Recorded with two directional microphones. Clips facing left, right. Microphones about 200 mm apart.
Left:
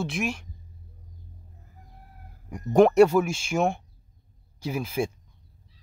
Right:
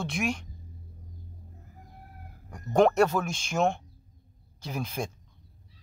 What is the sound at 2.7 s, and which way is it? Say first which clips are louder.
Speech: left 5 dB; 10° left (ahead or behind).